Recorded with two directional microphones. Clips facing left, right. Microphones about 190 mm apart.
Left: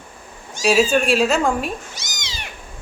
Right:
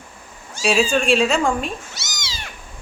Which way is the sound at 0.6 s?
5° left (ahead or behind).